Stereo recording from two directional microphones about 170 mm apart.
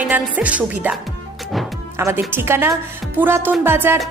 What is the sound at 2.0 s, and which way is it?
A woman's voice, 15° right (ahead or behind).